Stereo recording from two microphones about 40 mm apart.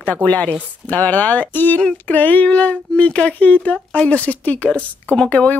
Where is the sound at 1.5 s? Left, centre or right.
Left.